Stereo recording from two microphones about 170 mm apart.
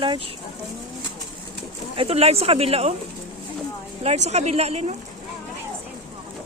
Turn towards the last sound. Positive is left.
turn(degrees=-40)  # may be behind; listen again after turning